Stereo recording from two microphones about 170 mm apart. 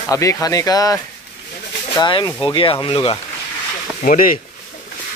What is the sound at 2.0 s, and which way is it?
Speech, 25° left (ahead or behind).